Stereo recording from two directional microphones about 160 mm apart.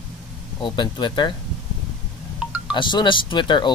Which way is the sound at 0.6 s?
25° left (ahead or behind).